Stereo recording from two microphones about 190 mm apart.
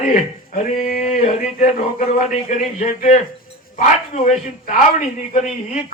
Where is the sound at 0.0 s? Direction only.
40° left (ahead or behind).